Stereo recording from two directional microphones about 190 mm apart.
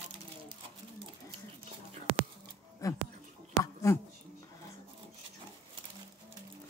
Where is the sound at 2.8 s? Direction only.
15° left (ahead or behind).